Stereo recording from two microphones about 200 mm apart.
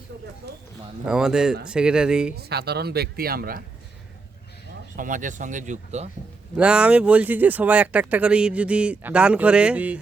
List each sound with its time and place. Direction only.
0.4 s speech: 55° right (ahead or behind)
1.0 s speech: 5° right (ahead or behind)
2.3 s speech: 50° right (ahead or behind)
4.9 s speech: 40° right (ahead or behind)
6.6 s speech: 5° right (ahead or behind)